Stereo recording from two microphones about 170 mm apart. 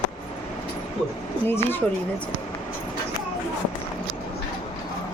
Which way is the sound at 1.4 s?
10° left (ahead or behind).